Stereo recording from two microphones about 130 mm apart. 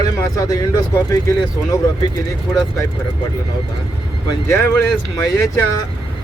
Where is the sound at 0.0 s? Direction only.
25° left (ahead or behind).